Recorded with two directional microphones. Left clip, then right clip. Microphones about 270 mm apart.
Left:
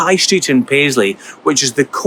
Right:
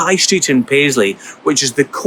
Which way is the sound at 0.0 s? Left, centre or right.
Centre.